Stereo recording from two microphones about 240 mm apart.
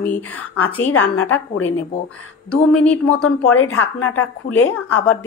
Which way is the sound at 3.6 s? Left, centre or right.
Left.